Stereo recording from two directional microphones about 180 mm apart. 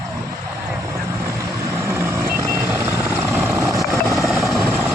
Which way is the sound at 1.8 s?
15° right (ahead or behind).